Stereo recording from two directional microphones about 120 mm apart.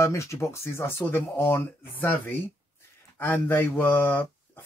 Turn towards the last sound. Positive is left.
turn(degrees=15)  # may be behind; listen again after turning